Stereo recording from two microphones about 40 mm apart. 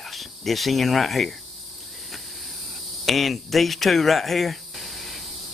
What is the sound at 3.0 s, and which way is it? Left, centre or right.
Speech, centre.